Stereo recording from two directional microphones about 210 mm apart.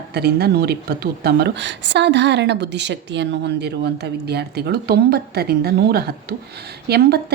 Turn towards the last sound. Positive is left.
turn(degrees=-50)  # may be behind; listen again after turning